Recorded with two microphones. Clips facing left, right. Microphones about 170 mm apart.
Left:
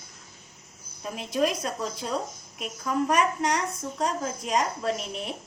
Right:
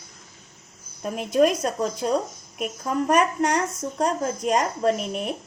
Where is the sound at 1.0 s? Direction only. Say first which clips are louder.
Right 6 dB; 50° right (ahead or behind).